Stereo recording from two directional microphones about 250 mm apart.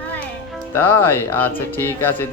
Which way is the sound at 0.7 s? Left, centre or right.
Centre.